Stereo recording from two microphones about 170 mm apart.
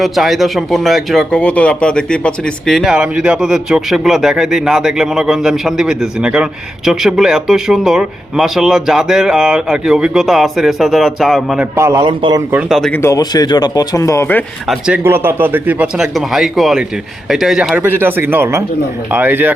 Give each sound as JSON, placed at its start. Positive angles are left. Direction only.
{"t": 0.0, "sound": "speech", "side_deg": 0}
{"t": 11.8, "sound": "a man's voice", "side_deg": -20}
{"t": 12.0, "sound": "a man's voice", "side_deg": -30}
{"t": 12.5, "sound": "speech", "side_deg": -5}
{"t": 12.9, "sound": "speech", "side_deg": 15}
{"t": 14.7, "sound": "speech", "side_deg": -5}